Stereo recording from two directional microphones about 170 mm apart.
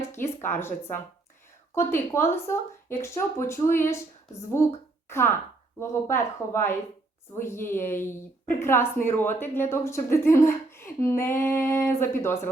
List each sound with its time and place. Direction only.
0.1 s a woman's voice: 15° left (ahead or behind)